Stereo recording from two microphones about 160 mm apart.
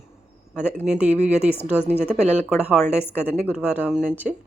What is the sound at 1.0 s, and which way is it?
Speech, 45° right (ahead or behind).